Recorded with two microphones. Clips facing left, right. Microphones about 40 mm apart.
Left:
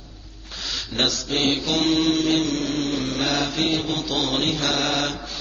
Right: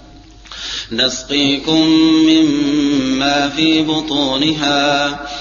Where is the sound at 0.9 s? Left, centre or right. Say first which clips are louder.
Right 7 dB; right.